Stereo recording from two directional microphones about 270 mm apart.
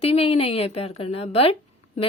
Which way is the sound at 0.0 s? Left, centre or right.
Left.